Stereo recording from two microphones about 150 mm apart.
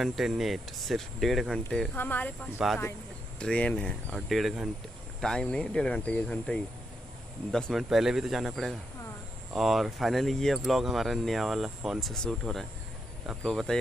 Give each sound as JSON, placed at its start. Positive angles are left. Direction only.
{"t": 0.0, "sound": "speech", "side_deg": 0}
{"t": 2.0, "sound": "speech", "side_deg": 10}
{"t": 2.5, "sound": "speech", "side_deg": 0}